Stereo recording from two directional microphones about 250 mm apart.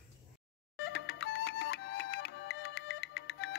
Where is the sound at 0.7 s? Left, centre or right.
Left.